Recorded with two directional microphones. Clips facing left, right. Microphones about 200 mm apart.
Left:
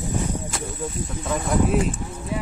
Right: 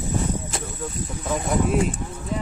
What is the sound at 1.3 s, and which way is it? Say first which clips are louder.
Speech: left 1 dB; centre (ahead or behind).